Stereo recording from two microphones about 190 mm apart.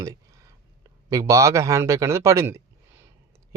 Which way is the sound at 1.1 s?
15° right (ahead or behind).